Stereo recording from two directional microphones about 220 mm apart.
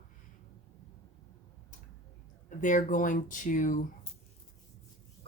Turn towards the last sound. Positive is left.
turn(degrees=35)  # may be behind; listen again after turning